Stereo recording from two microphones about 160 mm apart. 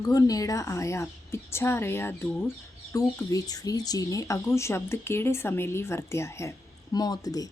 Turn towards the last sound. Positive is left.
turn(degrees=25)  # may be behind; listen again after turning